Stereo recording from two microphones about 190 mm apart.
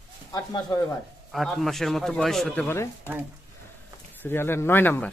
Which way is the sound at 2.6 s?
10° left (ahead or behind).